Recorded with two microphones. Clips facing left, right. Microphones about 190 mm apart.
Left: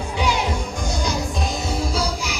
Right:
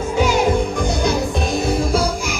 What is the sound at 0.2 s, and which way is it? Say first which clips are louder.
Music: right 7 dB; 45° right (ahead or behind).